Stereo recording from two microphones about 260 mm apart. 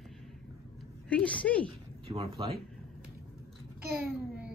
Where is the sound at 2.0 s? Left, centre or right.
Right.